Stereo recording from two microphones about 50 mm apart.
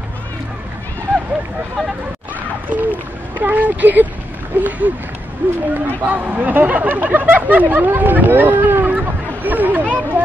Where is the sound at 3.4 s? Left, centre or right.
Right.